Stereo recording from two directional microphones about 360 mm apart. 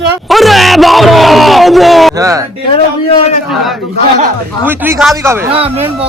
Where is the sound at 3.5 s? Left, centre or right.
Centre.